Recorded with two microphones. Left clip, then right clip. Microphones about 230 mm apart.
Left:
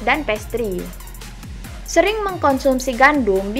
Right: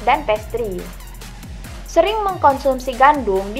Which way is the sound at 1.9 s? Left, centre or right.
Left.